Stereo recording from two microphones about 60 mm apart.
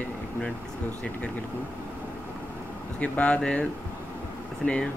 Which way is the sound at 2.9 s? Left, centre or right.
Left.